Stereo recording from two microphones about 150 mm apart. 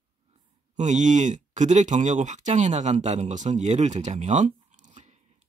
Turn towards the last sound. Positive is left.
turn(degrees=-50)  # may be behind; listen again after turning